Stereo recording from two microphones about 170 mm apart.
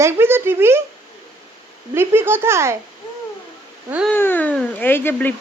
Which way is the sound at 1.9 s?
15° right (ahead or behind).